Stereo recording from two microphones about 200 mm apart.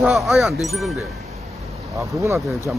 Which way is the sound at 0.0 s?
Centre (ahead or behind).